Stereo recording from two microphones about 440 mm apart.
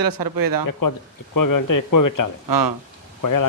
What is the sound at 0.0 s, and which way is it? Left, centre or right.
Speech, right.